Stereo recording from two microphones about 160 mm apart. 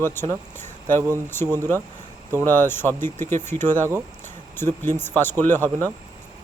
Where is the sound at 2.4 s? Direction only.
15° left (ahead or behind).